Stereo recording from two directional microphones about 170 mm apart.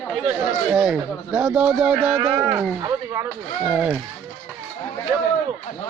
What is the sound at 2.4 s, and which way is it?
Speech, 15° right (ahead or behind).